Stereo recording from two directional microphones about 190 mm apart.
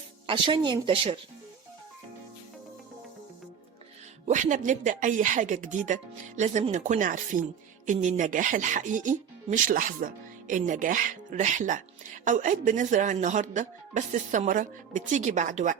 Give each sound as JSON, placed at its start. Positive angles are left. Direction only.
{"t": 0.3, "sound": "speech", "side_deg": -25}
{"t": 4.3, "sound": "speech", "side_deg": -40}